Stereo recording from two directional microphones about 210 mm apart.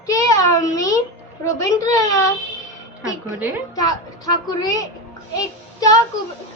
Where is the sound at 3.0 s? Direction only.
10° right (ahead or behind).